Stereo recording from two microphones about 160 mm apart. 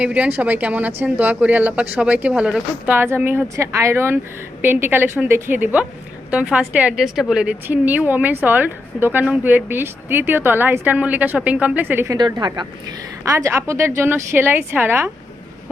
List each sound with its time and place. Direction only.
0.0 s speech: 10° right (ahead or behind)
12.1 s a woman's voice: 25° right (ahead or behind)